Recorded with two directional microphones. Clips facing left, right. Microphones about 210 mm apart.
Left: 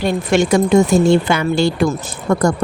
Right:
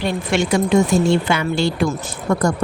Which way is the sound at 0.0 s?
45° left (ahead or behind).